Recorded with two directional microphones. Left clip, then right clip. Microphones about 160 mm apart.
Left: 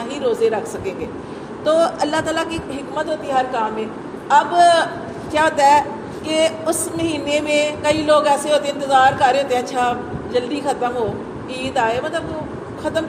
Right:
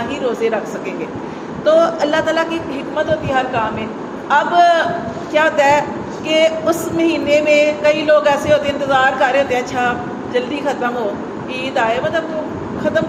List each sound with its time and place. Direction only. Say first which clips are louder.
1.6 s music: right 4 dB; 50° left (ahead or behind)